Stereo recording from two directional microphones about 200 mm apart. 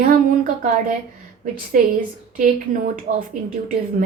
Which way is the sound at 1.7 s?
40° right (ahead or behind).